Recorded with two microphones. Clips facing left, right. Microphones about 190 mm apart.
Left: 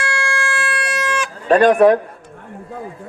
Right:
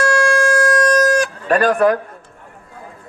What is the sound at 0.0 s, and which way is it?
Guitar, 40° right (ahead or behind).